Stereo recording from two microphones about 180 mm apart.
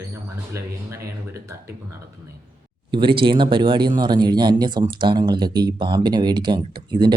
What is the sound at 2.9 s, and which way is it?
Speech, 30° right (ahead or behind).